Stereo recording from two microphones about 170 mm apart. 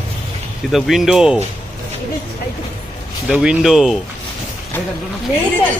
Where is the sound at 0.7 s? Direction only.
Centre (ahead or behind).